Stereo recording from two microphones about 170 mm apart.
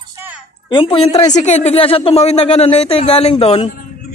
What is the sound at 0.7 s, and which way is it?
Speech, 30° left (ahead or behind).